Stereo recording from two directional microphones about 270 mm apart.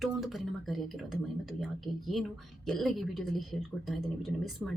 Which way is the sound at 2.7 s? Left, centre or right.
Centre.